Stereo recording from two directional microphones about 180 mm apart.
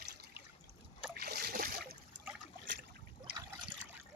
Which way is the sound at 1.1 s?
60° right (ahead or behind).